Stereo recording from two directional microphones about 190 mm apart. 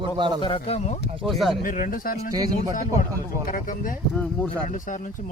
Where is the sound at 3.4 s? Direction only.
45° left (ahead or behind).